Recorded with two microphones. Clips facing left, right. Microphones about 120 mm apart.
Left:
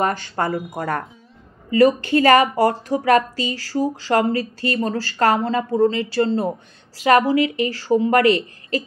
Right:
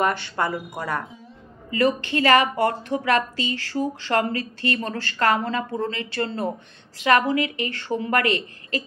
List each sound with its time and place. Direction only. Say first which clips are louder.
0.0 s a woman's voice: left 2 dB; 40° left (ahead or behind)